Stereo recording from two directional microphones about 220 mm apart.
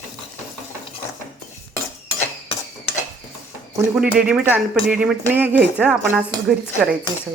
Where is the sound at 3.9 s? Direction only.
5° right (ahead or behind).